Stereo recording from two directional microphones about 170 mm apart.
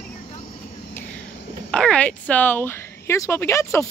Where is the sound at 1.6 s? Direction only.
5° left (ahead or behind).